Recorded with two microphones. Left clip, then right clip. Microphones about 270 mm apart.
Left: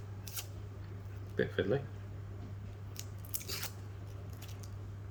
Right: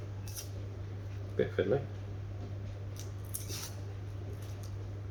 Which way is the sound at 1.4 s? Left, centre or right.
Left.